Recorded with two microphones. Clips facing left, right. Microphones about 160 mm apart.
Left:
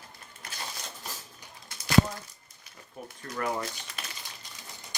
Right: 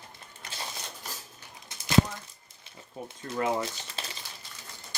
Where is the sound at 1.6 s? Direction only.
20° right (ahead or behind).